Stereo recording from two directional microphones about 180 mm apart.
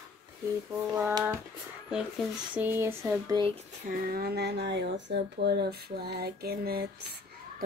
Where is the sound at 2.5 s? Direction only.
10° right (ahead or behind).